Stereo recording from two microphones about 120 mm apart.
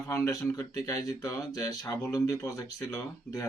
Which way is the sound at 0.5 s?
25° left (ahead or behind).